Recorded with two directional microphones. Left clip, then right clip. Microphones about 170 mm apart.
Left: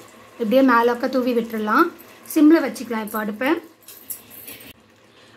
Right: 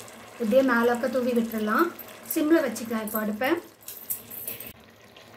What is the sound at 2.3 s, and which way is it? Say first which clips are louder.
Speech: left 7 dB; 50° left (ahead or behind).